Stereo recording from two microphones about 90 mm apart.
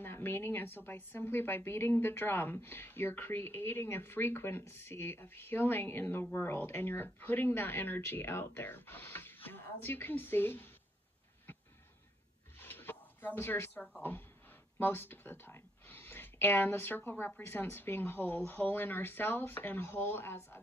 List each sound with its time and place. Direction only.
0.0 s a woman's voice: 25° left (ahead or behind)
12.5 s a sound: 25° left (ahead or behind)
14.8 s a woman's voice: 20° left (ahead or behind)